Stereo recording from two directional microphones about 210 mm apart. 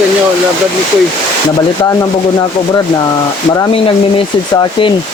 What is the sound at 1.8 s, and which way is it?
Speech, 15° left (ahead or behind).